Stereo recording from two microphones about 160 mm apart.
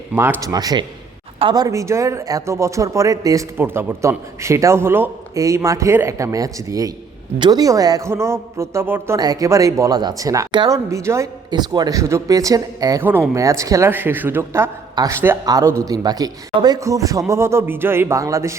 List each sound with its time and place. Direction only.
0.1 s a man's voice: 15° right (ahead or behind)